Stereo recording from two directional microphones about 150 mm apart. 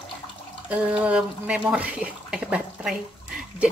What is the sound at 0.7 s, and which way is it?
Speech, 10° right (ahead or behind).